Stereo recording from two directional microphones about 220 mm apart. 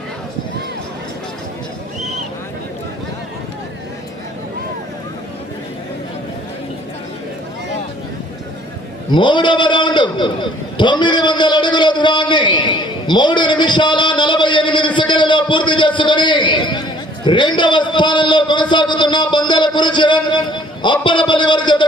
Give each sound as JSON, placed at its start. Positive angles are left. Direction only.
{"t": 9.1, "sound": "a man's voice", "side_deg": 20}